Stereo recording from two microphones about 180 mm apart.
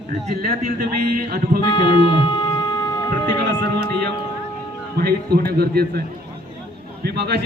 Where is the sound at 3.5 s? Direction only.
70° right (ahead or behind).